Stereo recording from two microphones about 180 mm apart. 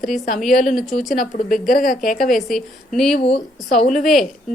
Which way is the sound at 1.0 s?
50° left (ahead or behind).